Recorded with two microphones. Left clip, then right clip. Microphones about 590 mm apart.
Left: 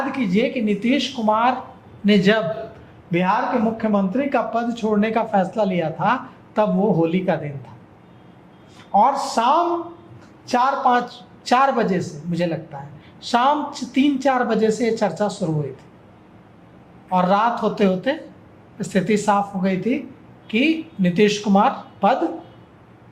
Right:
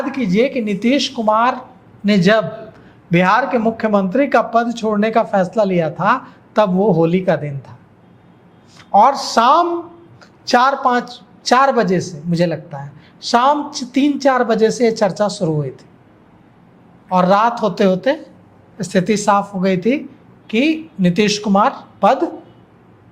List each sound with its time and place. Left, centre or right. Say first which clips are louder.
0.1 s speech: right 5 dB; right
8.9 s speech: right 5 dB; right
17.1 s speech: right 5 dB; right